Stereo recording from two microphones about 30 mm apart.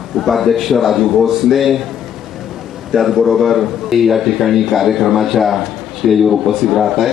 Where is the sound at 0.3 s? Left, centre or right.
Centre.